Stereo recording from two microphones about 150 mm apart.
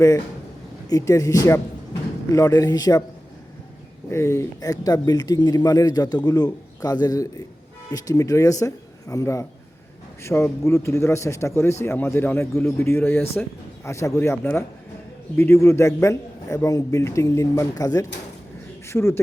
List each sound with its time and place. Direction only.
0.9 s speech: 20° left (ahead or behind)
4.1 s a man's voice: 20° left (ahead or behind)